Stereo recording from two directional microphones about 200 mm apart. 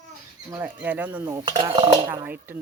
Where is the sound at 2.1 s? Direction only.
10° right (ahead or behind).